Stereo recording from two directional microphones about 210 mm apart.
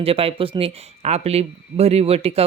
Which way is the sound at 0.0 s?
25° right (ahead or behind).